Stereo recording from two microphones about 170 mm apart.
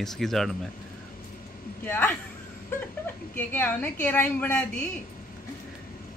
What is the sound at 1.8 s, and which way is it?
Speech, 10° left (ahead or behind).